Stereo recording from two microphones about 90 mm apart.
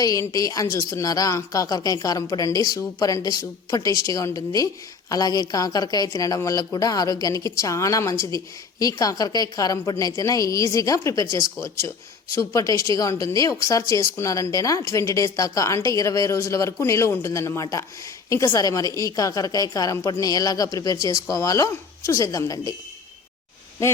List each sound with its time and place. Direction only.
0.0 s speech: 40° left (ahead or behind)